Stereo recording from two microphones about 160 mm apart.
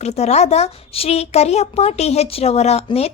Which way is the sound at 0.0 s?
45° left (ahead or behind).